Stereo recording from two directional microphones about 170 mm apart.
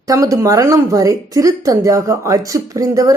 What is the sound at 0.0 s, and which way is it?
Speech, 20° right (ahead or behind).